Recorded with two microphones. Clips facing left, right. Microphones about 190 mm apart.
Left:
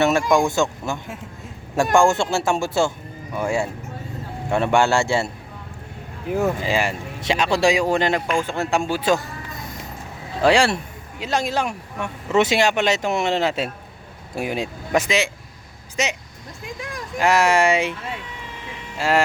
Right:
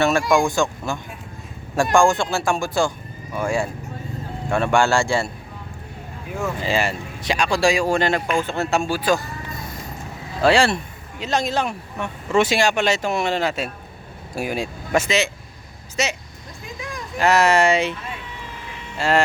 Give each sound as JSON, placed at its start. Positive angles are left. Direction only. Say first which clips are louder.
{"t": 0.0, "sound": "speech", "louder": "even", "side_deg": 20}
{"t": 6.6, "sound": "speech", "louder": "even", "side_deg": 15}
{"t": 10.4, "sound": "speech", "louder": "even", "side_deg": 15}
{"t": 17.2, "sound": "speech", "louder": "right 1 dB", "side_deg": 10}
{"t": 18.9, "sound": "speech", "louder": "even", "side_deg": 10}